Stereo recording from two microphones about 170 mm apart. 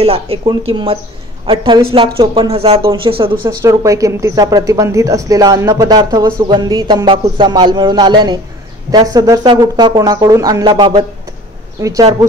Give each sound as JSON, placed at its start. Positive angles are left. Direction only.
{"t": 0.0, "sound": "speech", "side_deg": -35}
{"t": 3.4, "sound": "speech", "side_deg": -20}